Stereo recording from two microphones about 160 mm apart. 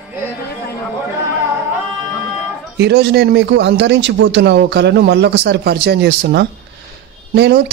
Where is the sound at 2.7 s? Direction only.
90° right.